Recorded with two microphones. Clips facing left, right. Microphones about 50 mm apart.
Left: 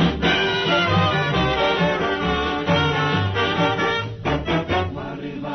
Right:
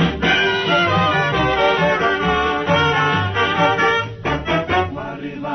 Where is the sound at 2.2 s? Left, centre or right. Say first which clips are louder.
Right 4 dB; right.